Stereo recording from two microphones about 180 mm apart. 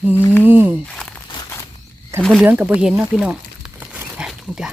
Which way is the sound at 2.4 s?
10° right (ahead or behind).